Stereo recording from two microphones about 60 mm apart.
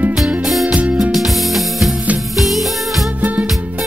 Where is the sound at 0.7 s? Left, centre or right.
Right.